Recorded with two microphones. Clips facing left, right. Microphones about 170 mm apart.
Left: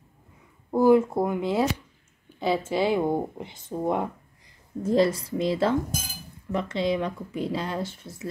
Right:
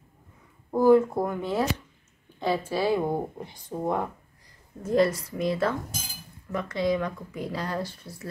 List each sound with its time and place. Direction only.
0.7 s speech: 10° left (ahead or behind)
4.8 s speech: 30° left (ahead or behind)